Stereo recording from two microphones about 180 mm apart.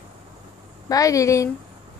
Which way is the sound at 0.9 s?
20° left (ahead or behind).